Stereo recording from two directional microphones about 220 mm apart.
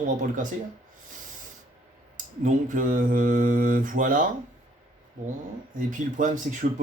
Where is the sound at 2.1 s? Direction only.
35° right (ahead or behind).